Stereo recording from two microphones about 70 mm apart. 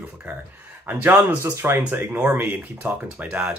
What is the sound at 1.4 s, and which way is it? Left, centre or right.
Speech, right.